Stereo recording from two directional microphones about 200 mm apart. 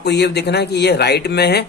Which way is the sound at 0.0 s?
55° left (ahead or behind).